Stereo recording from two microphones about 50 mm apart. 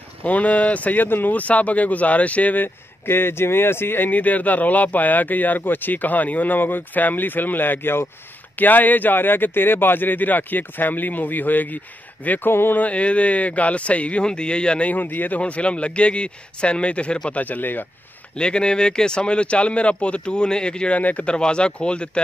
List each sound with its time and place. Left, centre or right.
0.2 s speech: left
1.0 s speech: left
2.6 s speech: left
4.1 s speech: left
8.5 s speech: left
12.4 s speech: left
12.7 s a man's voice: left
14.9 s a man's voice: left
17.4 s speech: left
18.3 s a man's voice: centre
21.0 s speech: left
21.3 s a man's voice: centre